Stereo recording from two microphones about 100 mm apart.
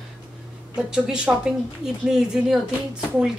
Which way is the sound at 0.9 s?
10° right (ahead or behind).